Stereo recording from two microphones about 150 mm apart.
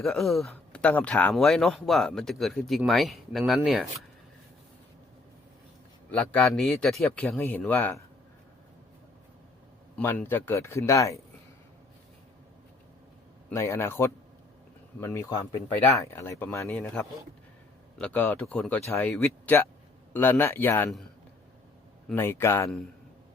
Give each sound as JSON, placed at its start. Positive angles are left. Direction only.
{"t": 0.0, "sound": "speech", "side_deg": 0}
{"t": 6.1, "sound": "a man's voice", "side_deg": 10}
{"t": 10.0, "sound": "a man's voice", "side_deg": 15}
{"t": 13.5, "sound": "a man's voice", "side_deg": 15}
{"t": 22.1, "sound": "a man's voice", "side_deg": 15}